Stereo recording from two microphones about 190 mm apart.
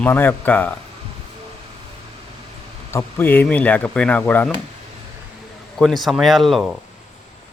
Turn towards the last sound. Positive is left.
turn(degrees=0)  # may be behind; listen again after turning